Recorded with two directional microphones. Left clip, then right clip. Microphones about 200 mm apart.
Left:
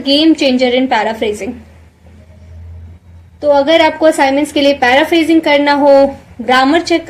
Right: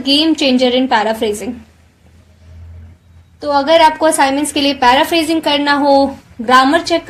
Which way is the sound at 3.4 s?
35° right (ahead or behind).